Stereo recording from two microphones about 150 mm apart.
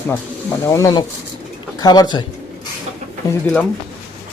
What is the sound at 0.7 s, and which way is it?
Speech, 25° left (ahead or behind).